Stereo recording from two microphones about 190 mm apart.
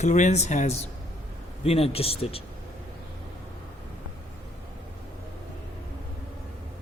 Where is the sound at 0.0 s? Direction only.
40° left (ahead or behind).